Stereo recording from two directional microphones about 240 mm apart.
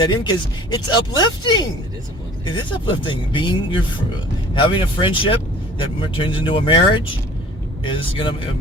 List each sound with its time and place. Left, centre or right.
0.0 s speech: centre
7.9 s speech: left